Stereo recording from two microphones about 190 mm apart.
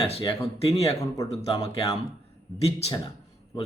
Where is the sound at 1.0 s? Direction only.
15° left (ahead or behind).